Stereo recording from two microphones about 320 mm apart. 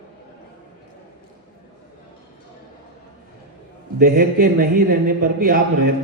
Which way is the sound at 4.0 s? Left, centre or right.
Right.